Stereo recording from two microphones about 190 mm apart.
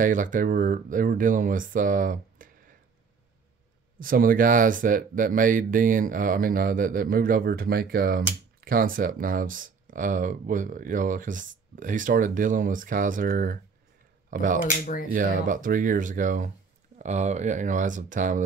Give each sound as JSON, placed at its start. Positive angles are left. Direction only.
{"t": 0.0, "sound": "speech", "side_deg": -45}
{"t": 4.0, "sound": "speech", "side_deg": -50}